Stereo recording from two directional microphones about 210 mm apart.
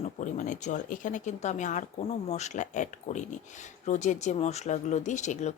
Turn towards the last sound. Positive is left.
turn(degrees=35)  # may be behind; listen again after turning